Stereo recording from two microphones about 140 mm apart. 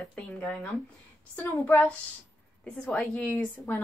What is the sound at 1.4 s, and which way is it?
Speech, 15° left (ahead or behind).